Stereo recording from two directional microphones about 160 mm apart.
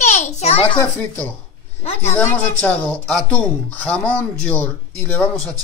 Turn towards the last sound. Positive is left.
turn(degrees=10)  # may be behind; listen again after turning